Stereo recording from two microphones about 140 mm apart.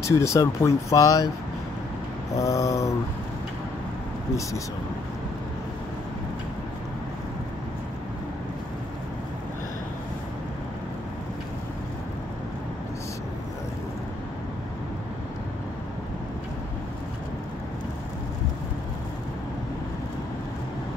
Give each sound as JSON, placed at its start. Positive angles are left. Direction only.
{"t": 0.0, "sound": "speech", "side_deg": 20}
{"t": 2.3, "sound": "speech", "side_deg": 25}